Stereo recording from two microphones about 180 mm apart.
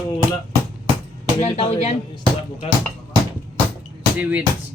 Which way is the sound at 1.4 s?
35° left (ahead or behind).